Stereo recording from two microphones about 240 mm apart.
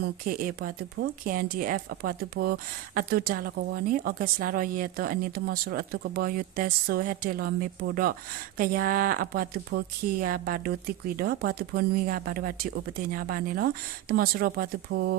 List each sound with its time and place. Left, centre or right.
0.3 s speech: right